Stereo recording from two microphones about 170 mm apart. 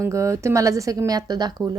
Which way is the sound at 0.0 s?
15° right (ahead or behind).